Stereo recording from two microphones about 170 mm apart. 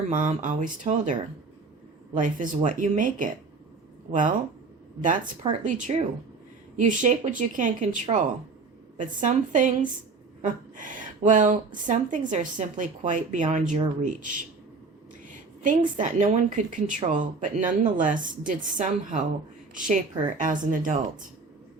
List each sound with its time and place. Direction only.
0.1 s a woman's voice: 45° right (ahead or behind)
2.1 s a woman's voice: 50° right (ahead or behind)